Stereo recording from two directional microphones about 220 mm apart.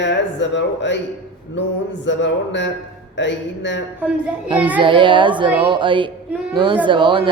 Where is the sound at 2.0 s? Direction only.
55° left (ahead or behind).